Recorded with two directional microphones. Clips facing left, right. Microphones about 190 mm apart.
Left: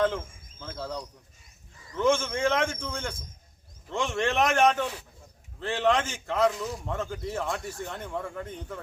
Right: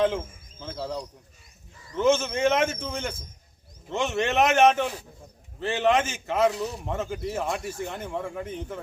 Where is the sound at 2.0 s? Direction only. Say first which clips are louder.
Right 3 dB; 20° right (ahead or behind).